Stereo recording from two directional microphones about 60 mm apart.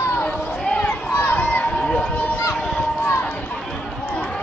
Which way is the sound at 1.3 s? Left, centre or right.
Left.